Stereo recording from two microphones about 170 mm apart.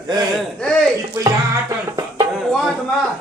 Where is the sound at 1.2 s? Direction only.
20° right (ahead or behind).